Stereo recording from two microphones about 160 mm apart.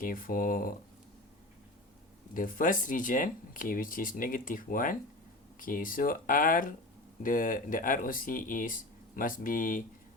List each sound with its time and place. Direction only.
0.0 s speech: 60° left (ahead or behind)
2.3 s speech: 60° left (ahead or behind)